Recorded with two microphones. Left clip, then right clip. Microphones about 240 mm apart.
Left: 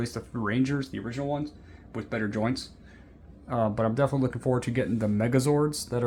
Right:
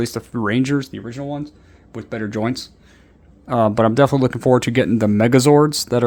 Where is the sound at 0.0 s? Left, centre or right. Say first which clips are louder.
Right 10 dB; right.